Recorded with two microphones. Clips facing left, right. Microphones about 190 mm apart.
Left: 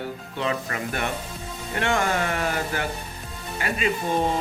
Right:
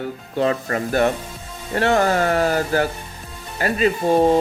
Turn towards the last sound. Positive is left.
turn(degrees=-35)  # may be behind; listen again after turning